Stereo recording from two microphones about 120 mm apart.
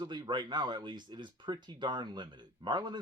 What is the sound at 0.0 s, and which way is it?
Speech, 40° right (ahead or behind).